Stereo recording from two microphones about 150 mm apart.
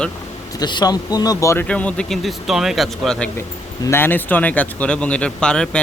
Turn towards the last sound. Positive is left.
turn(degrees=5)  # may be behind; listen again after turning